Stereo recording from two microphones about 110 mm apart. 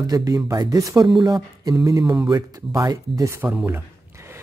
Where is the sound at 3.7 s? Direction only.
25° right (ahead or behind).